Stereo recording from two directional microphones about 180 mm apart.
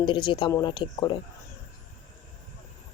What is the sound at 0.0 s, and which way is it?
Speech, 25° left (ahead or behind).